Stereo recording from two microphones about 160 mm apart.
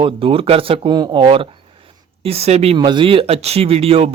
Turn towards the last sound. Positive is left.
turn(degrees=-35)  # may be behind; listen again after turning